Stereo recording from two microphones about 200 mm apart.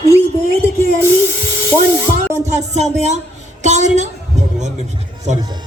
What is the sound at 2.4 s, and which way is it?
A man's voice, 35° right (ahead or behind).